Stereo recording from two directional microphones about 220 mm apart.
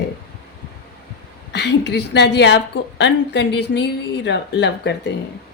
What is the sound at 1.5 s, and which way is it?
A woman's voice, 50° left (ahead or behind).